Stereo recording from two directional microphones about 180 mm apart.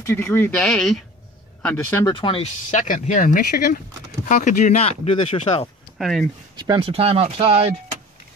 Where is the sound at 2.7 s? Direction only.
40° left (ahead or behind).